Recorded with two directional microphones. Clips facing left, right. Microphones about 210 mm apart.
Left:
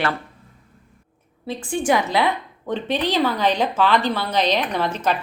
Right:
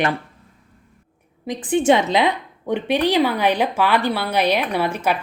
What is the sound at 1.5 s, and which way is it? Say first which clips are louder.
A woman's voice: right 5 dB; 20° right (ahead or behind).